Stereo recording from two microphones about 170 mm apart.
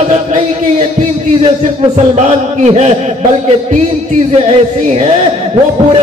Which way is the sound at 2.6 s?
40° right (ahead or behind).